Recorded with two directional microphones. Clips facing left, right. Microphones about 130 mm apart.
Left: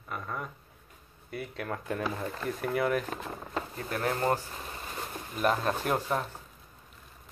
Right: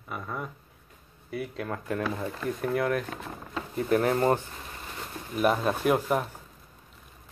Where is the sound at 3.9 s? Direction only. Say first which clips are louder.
Right 6 dB; 30° right (ahead or behind).